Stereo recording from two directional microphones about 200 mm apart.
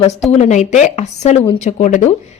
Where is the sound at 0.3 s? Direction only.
35° left (ahead or behind).